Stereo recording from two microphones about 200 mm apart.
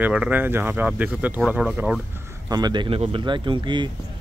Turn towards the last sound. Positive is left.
turn(degrees=-25)  # may be behind; listen again after turning